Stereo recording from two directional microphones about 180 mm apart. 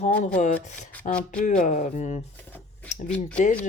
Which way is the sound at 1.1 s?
5° left (ahead or behind).